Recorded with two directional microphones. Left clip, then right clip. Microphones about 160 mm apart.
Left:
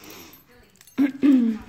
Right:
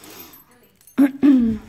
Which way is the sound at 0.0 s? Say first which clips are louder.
Right 1 dB; 35° right (ahead or behind).